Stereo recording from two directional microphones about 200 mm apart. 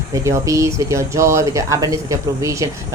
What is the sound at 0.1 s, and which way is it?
A woman's voice, 15° right (ahead or behind).